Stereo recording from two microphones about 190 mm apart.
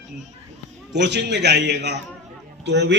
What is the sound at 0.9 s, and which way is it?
A man's voice, 65° right (ahead or behind).